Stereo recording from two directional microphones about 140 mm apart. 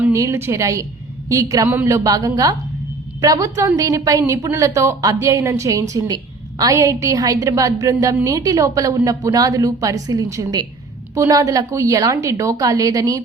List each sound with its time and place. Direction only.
0.1 s a woman's voice: 20° right (ahead or behind)
2.0 s a woman's voice: 25° right (ahead or behind)